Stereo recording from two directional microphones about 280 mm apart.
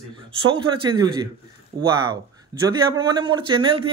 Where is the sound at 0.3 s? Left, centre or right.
Centre.